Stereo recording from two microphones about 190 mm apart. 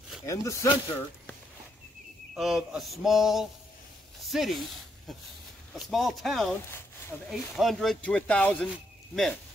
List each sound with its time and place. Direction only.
0.3 s speech: 15° left (ahead or behind)
2.3 s speech: centre (ahead or behind)
4.2 s a sound: centre (ahead or behind)
5.8 s speech: centre (ahead or behind)